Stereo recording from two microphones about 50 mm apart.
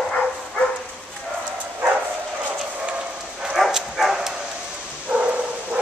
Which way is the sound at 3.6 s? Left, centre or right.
Centre.